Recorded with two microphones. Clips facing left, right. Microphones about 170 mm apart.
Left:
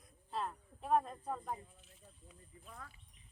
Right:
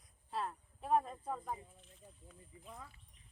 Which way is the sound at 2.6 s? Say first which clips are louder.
Right 1 dB; 20° right (ahead or behind).